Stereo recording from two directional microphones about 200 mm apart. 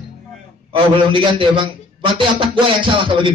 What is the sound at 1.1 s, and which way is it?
A man's voice, 25° right (ahead or behind).